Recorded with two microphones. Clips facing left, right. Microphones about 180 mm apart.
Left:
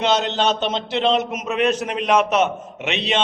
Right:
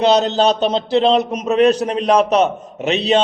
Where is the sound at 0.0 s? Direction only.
35° right (ahead or behind).